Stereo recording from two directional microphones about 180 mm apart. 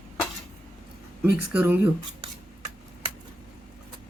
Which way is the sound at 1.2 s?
10° right (ahead or behind).